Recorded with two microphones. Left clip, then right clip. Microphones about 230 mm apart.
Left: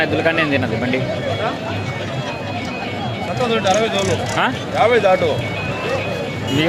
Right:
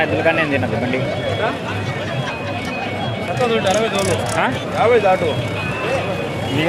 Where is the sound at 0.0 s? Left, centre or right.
Centre.